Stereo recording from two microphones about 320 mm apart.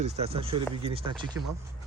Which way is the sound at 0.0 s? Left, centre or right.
Centre.